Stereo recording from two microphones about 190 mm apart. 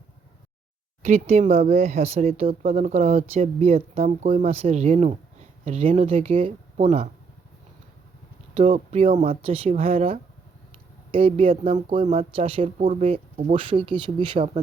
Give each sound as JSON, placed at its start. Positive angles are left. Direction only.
{"t": 1.0, "sound": "speech", "side_deg": -35}
{"t": 8.5, "sound": "speech", "side_deg": -35}